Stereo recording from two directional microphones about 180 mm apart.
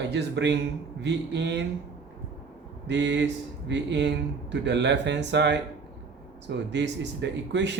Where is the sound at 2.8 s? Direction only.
85° right.